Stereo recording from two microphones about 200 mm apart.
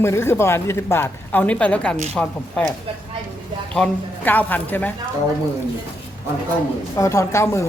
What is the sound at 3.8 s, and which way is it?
Speech, 10° left (ahead or behind).